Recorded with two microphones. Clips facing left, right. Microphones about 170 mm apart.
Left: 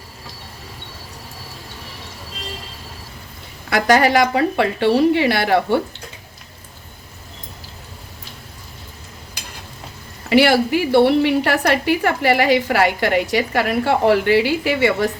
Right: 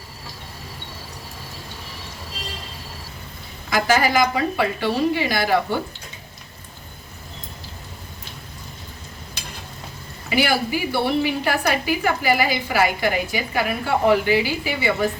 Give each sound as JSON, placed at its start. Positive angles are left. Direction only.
{"t": 3.7, "sound": "a woman's voice", "side_deg": 65}
{"t": 10.2, "sound": "a woman's voice", "side_deg": 70}